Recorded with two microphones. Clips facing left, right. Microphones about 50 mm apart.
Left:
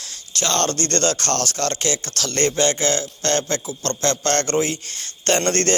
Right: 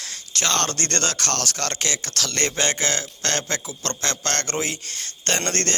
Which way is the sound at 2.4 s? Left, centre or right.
Centre.